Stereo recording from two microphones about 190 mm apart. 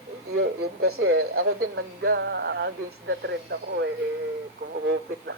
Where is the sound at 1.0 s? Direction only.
90° right; by 3.9 s 70° right (ahead or behind).